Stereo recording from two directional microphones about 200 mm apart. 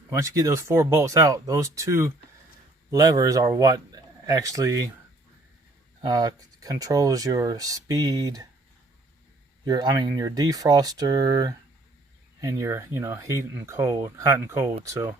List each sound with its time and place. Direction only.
0.1 s a man's voice: 15° right (ahead or behind)
6.0 s speech: 20° right (ahead or behind)
9.6 s speech: 20° right (ahead or behind)